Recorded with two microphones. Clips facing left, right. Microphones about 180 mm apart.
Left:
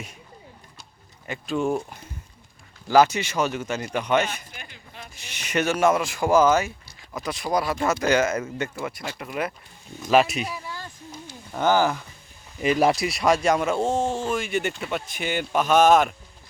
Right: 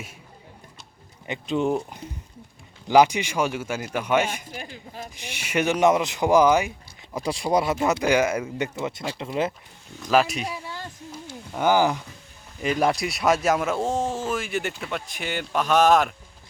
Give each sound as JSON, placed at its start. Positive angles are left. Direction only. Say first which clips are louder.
{"t": 1.3, "sound": "speech", "louder": "right 1 dB", "side_deg": -20}
{"t": 4.5, "sound": "a sound", "louder": "right 7 dB", "side_deg": -35}
{"t": 5.1, "sound": "speech", "louder": "even", "side_deg": -10}
{"t": 7.2, "sound": "speech", "louder": "right 3 dB", "side_deg": -30}
{"t": 10.0, "sound": "speech", "louder": "left 2 dB", "side_deg": 5}
{"t": 10.4, "sound": "a sound", "louder": "right 1 dB", "side_deg": -25}
{"t": 11.5, "sound": "speech", "louder": "even", "side_deg": -10}
{"t": 12.6, "sound": "speech", "louder": "left 2 dB", "side_deg": 5}